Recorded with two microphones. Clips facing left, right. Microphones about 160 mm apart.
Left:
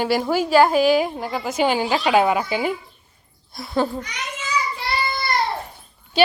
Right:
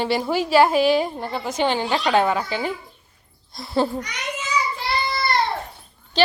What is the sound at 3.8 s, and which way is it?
Speech, 10° right (ahead or behind).